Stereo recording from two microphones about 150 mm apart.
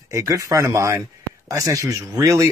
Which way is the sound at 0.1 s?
20° right (ahead or behind).